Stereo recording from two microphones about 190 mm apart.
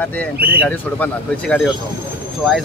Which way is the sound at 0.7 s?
10° left (ahead or behind).